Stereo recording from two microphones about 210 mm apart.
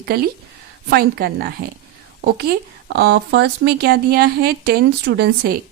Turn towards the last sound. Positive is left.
turn(degrees=-50)  # may be behind; listen again after turning